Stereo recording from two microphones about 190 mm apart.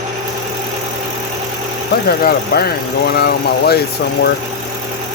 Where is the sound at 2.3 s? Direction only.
55° left (ahead or behind).